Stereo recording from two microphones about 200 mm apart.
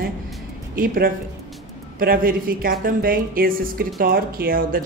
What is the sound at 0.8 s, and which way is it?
Speech, 45° right (ahead or behind).